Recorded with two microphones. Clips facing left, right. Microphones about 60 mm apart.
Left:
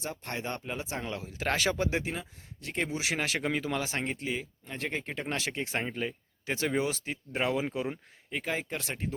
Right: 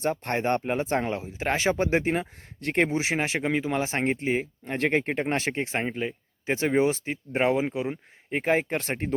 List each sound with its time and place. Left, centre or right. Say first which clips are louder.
0.0 s speech: right 10 dB; right
1.1 s speech: right 4 dB; right
2.9 s speech: right 5 dB; right
5.7 s speech: right 4 dB; centre
8.3 s speech: right 9 dB; right